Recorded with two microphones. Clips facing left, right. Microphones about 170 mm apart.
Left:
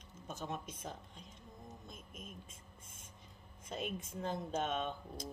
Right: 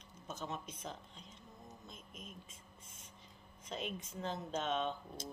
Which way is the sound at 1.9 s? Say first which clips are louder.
Left 1 dB; 50° left (ahead or behind).